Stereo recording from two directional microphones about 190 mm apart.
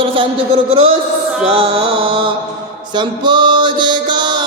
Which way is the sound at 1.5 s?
30° right (ahead or behind).